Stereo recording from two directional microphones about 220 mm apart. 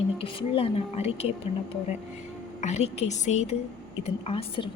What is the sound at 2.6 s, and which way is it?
A woman's voice, 30° left (ahead or behind).